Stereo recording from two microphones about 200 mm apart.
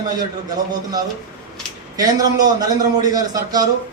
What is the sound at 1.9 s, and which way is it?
A man's voice, 20° right (ahead or behind).